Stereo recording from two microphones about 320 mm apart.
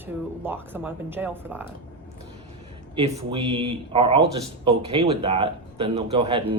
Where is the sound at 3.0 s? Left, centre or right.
Centre.